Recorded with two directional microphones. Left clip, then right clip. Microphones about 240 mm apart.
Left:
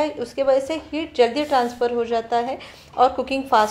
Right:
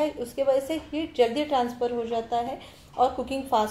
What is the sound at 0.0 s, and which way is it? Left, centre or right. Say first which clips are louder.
A woman's voice: left 4 dB; centre.